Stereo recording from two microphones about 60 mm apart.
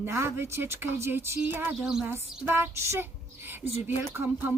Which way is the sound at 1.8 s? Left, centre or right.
Centre.